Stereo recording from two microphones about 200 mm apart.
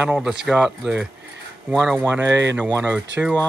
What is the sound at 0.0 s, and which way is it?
Speech, 5° right (ahead or behind).